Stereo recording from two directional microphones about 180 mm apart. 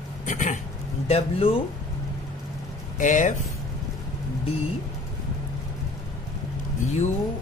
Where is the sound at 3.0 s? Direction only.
45° left (ahead or behind).